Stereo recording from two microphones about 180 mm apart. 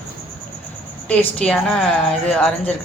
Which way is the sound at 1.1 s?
5° left (ahead or behind).